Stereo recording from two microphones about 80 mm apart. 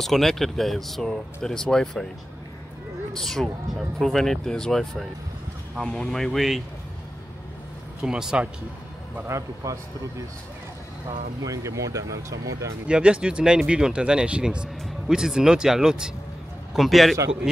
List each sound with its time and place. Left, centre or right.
0.0 s speech: centre
3.2 s speech: centre
8.0 s speech: centre
9.3 s speech: right
11.1 s speech: right
12.8 s speech: centre